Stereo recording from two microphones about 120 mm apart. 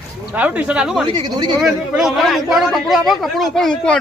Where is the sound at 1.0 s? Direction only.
40° right (ahead or behind).